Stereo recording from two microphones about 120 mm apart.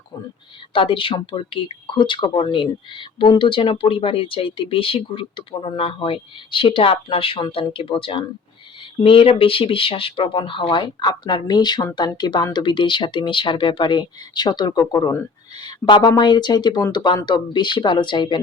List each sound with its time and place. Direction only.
0.7 s speech: 45° left (ahead or behind)